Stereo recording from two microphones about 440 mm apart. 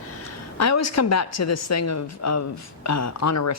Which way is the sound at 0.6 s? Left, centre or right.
Left.